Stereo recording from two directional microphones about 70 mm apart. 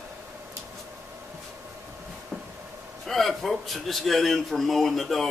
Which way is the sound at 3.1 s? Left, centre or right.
Centre.